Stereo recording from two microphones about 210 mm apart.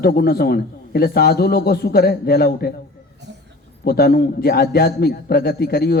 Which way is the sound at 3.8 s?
45° left (ahead or behind).